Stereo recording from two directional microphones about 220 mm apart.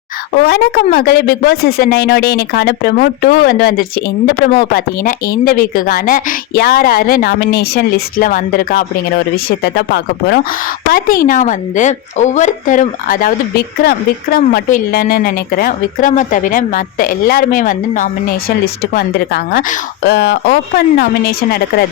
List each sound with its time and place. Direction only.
0.3 s speech: 45° left (ahead or behind)